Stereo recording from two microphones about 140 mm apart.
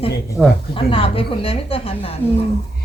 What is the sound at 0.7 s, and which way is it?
A woman's voice, 40° left (ahead or behind).